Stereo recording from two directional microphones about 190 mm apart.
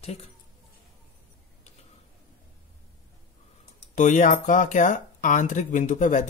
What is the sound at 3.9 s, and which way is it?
Speech, 40° left (ahead or behind).